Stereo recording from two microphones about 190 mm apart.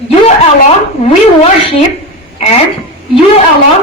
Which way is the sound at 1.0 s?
30° left (ahead or behind).